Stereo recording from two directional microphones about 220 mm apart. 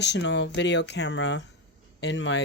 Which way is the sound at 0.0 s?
50° left (ahead or behind).